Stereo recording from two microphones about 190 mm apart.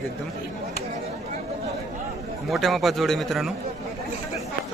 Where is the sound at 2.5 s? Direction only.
Centre (ahead or behind).